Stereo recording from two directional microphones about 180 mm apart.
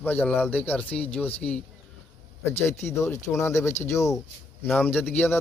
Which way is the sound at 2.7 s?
15° left (ahead or behind).